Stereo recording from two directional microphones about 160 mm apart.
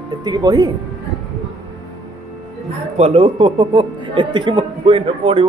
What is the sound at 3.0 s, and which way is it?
Speech, 35° right (ahead or behind).